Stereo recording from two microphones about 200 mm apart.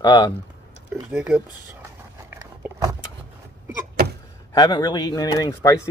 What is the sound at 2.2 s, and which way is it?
Biting, 15° right (ahead or behind).